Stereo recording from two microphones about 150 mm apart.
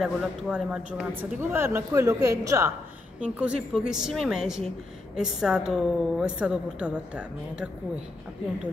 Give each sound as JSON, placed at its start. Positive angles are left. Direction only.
{"t": 0.0, "sound": "a woman's voice", "side_deg": -5}
{"t": 1.5, "sound": "a woman's voice", "side_deg": -15}
{"t": 3.2, "sound": "a woman's voice", "side_deg": -5}